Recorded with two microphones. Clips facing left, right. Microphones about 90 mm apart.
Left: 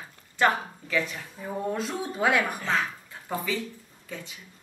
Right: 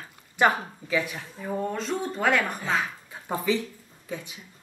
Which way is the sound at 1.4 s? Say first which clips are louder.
Right 1 dB; 5° left (ahead or behind).